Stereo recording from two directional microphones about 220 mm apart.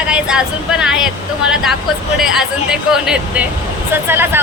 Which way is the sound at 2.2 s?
Centre (ahead or behind).